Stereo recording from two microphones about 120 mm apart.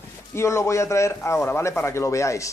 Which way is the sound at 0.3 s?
25° left (ahead or behind).